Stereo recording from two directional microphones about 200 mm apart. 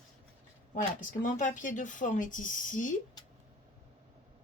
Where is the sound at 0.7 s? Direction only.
40° left (ahead or behind).